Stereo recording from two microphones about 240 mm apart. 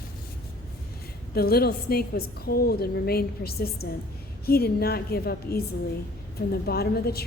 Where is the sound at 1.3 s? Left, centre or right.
Left.